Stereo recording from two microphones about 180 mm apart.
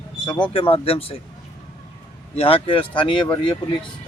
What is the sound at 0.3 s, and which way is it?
Speech, 25° left (ahead or behind).